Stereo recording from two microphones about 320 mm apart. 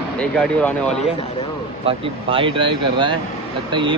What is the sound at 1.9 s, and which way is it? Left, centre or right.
Speech, centre.